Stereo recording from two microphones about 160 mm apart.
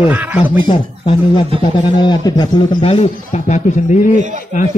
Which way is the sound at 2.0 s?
25° left (ahead or behind).